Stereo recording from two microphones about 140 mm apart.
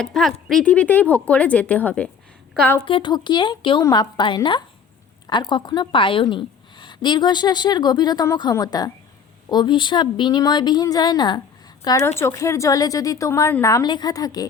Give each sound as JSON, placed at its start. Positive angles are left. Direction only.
{"t": 0.0, "sound": "a woman's voice", "side_deg": 5}
{"t": 2.8, "sound": "a woman's voice", "side_deg": 35}
{"t": 3.8, "sound": "a woman's voice", "side_deg": 25}
{"t": 4.2, "sound": "a woman's voice", "side_deg": 35}